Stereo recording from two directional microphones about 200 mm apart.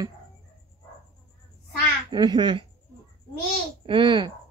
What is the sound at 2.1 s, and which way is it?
Speech, 20° right (ahead or behind).